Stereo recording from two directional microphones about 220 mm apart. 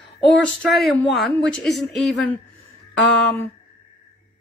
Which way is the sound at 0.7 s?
Centre (ahead or behind).